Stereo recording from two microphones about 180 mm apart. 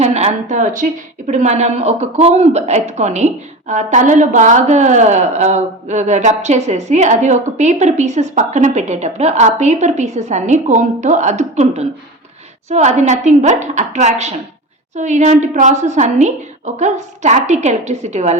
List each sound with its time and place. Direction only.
0.0 s a woman's voice: 40° right (ahead or behind)